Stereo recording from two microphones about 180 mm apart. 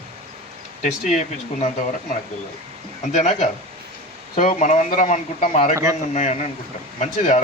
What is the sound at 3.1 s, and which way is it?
Speech, 40° left (ahead or behind).